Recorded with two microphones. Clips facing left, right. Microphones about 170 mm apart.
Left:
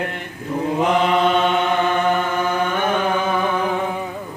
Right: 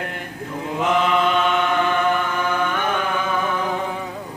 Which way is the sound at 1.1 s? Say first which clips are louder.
Left 2 dB; 40° left (ahead or behind).